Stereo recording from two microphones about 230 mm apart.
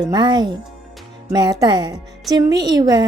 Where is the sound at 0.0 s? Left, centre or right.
Centre.